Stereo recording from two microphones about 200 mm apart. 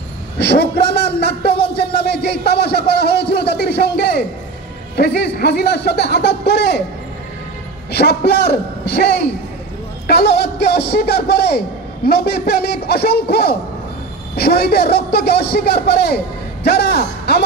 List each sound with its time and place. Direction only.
0.4 s a sound: 55° left (ahead or behind)
4.9 s speech: 55° left (ahead or behind)
7.9 s a man's voice: 55° left (ahead or behind)